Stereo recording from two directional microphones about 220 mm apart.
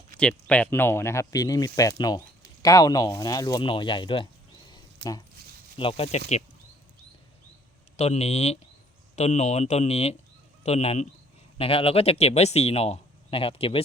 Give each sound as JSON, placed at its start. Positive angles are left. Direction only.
{"t": 0.2, "sound": "speech", "side_deg": 5}
{"t": 5.0, "sound": "speech", "side_deg": -50}
{"t": 5.7, "sound": "a man's voice", "side_deg": 25}
{"t": 7.9, "sound": "a man's voice", "side_deg": 30}